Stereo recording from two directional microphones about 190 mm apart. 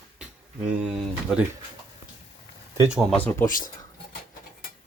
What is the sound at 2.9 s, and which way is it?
Speech, centre (ahead or behind).